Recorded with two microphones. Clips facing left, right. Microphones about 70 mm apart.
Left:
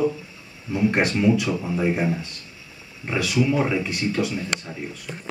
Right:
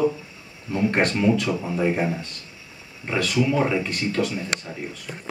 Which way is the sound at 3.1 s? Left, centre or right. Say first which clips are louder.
Even; centre.